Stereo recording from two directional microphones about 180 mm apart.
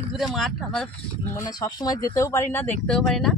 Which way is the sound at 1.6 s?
20° left (ahead or behind).